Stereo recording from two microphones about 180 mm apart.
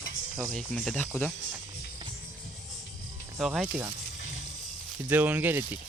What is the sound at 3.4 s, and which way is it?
Speech, 5° right (ahead or behind).